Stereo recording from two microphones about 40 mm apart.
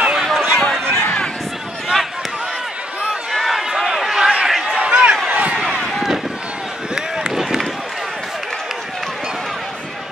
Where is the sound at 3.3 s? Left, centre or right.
Centre.